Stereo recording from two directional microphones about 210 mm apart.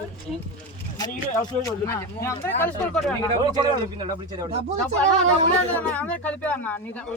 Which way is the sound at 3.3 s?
20° right (ahead or behind).